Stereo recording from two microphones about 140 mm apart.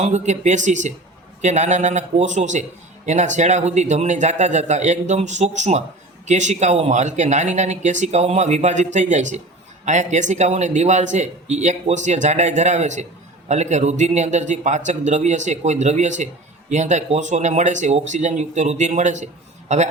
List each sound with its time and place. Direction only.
0.0 s a man's voice: 55° right (ahead or behind)